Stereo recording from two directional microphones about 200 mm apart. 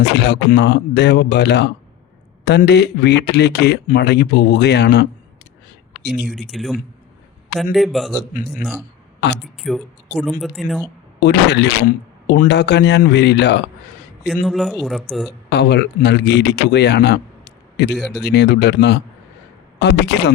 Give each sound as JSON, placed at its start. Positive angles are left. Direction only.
{"t": 0.0, "sound": "speech", "side_deg": 60}
{"t": 6.2, "sound": "speech", "side_deg": 0}
{"t": 9.2, "sound": "speech", "side_deg": 60}
{"t": 9.6, "sound": "speech", "side_deg": 0}
{"t": 11.2, "sound": "speech", "side_deg": 55}
{"t": 14.4, "sound": "speech", "side_deg": 0}
{"t": 15.4, "sound": "a man's voice", "side_deg": 55}